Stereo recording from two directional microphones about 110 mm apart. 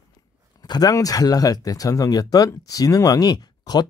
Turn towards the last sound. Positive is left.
turn(degrees=40)  # may be behind; listen again after turning